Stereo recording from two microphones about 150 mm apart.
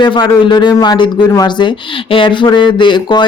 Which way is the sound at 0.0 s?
30° left (ahead or behind).